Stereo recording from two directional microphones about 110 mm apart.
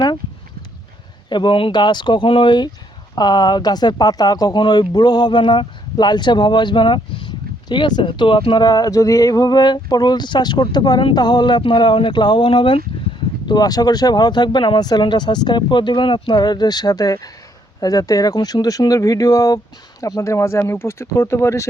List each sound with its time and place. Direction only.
1.3 s speech: 45° left (ahead or behind)
13.5 s speech: 35° left (ahead or behind)